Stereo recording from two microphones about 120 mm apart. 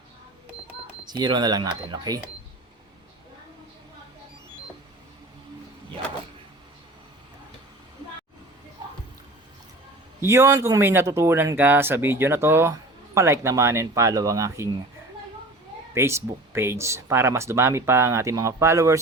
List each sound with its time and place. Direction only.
1.0 s speech: 35° right (ahead or behind)
10.2 s speech: 25° right (ahead or behind)
16.0 s speech: 20° right (ahead or behind)